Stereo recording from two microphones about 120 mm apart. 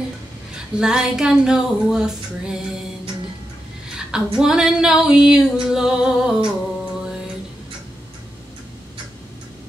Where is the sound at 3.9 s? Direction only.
5° right (ahead or behind).